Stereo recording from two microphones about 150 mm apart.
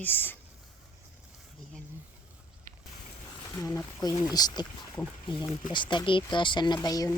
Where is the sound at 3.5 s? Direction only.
25° left (ahead or behind).